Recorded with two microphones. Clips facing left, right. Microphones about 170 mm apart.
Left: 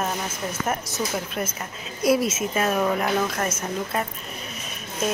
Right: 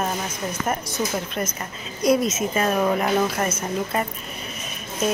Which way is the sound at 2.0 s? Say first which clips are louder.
Right 1 dB; 5° left (ahead or behind).